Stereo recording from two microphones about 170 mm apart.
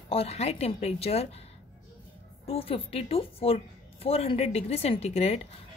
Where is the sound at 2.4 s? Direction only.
35° left (ahead or behind).